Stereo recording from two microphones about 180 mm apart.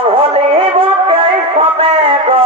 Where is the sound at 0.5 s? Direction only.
30° right (ahead or behind).